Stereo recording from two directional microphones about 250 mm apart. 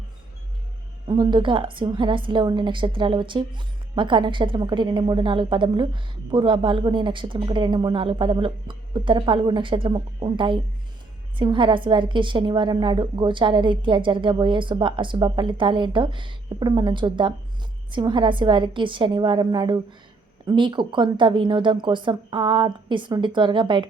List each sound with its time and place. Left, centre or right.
1.0 s a woman's voice: centre